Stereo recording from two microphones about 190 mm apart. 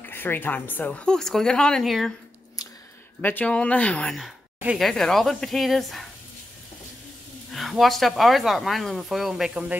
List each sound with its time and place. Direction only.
0.0 s speech: 10° left (ahead or behind)
3.2 s speech: 10° left (ahead or behind)
7.5 s speech: centre (ahead or behind)